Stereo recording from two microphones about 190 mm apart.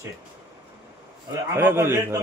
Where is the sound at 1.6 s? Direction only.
10° right (ahead or behind).